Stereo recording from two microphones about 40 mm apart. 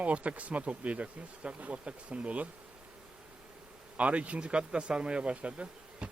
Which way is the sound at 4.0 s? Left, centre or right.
Right.